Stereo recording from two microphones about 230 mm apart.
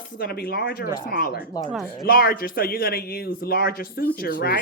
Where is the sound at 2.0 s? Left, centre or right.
Left.